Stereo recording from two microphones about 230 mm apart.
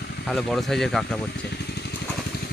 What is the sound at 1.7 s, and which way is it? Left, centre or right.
Vehicle, left.